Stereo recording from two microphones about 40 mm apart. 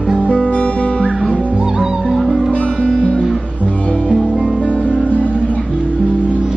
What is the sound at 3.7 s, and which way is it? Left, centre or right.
Music, left.